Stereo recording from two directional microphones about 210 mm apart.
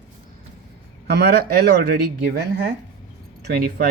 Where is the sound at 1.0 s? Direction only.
50° right (ahead or behind).